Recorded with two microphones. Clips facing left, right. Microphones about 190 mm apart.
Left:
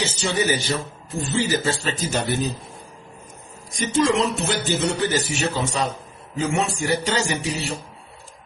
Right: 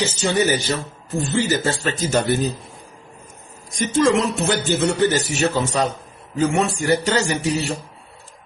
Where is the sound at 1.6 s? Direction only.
45° right (ahead or behind).